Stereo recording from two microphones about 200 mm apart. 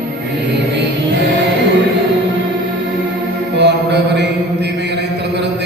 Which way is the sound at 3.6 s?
60° right (ahead or behind).